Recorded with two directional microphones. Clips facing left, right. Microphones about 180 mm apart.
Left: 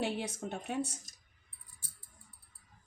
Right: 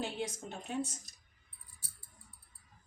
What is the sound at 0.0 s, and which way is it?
Speech, 70° left (ahead or behind).